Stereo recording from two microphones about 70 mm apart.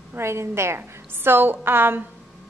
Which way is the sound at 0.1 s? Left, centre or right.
Right.